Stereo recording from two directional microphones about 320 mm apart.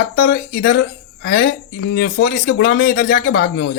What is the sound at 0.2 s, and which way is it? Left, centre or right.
A woman's voice, left.